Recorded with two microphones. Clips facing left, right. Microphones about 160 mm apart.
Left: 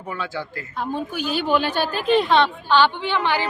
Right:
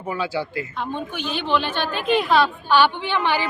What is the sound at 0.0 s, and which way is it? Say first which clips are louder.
Speech: right 4 dB; 10° right (ahead or behind).